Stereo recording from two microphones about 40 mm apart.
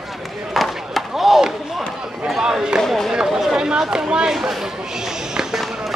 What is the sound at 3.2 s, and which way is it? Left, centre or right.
Chatter, centre.